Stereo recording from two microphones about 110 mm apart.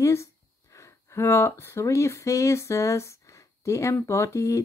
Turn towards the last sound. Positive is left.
turn(degrees=30)  # may be behind; listen again after turning